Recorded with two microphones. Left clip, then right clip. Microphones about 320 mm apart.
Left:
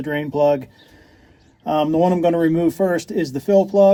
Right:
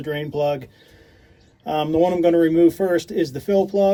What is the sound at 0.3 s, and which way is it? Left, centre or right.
Speech, centre.